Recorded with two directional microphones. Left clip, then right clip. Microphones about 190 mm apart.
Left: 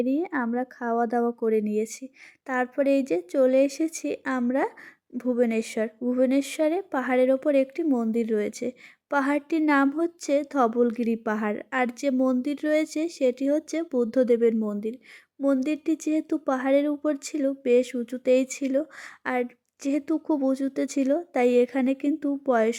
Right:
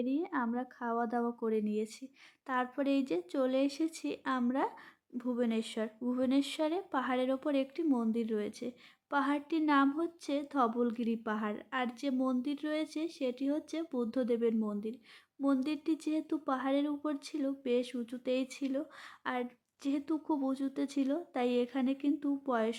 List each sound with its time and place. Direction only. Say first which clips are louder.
0.0 s a woman's voice: left 8 dB; 30° left (ahead or behind)